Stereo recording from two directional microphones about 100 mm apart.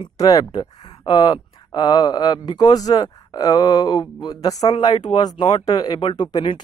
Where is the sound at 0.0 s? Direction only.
35° left (ahead or behind).